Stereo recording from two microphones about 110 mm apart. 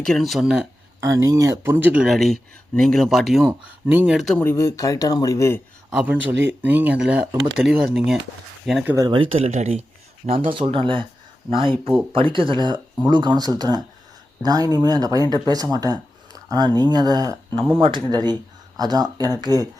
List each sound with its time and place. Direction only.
0.0 s speech: 5° left (ahead or behind)
1.0 s speech: 30° right (ahead or behind); by 2.1 s 10° right (ahead or behind)
2.1 s speech: centre (ahead or behind)
3.5 s speech: 15° right (ahead or behind)
4.4 s speech: 25° left (ahead or behind)
5.9 s speech: 5° right (ahead or behind)
9.3 s speech: 75° right (ahead or behind)
10.2 s speech: 60° right (ahead or behind); by 17.7 s 30° right (ahead or behind)
17.7 s speech: 55° right (ahead or behind)
18.1 s speech: 40° right (ahead or behind)